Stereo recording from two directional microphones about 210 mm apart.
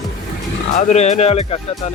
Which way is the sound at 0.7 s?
35° left (ahead or behind).